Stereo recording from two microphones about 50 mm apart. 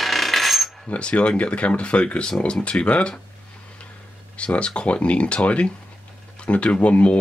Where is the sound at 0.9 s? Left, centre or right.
Left.